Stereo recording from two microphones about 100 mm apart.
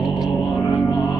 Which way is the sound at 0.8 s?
40° left (ahead or behind).